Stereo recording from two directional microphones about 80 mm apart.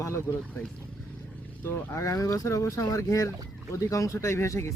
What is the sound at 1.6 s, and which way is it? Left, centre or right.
Speech, left.